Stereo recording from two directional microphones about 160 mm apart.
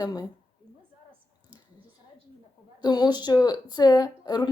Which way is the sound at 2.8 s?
25° left (ahead or behind).